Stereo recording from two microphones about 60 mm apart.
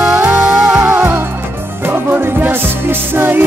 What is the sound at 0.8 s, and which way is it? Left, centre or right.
Music, right.